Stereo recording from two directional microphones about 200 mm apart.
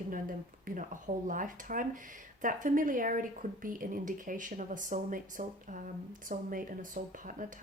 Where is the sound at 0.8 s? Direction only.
40° right (ahead or behind).